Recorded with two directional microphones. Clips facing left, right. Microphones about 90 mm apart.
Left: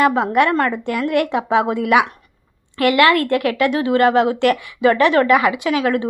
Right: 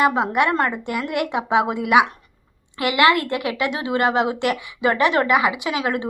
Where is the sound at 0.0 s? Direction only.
15° right (ahead or behind).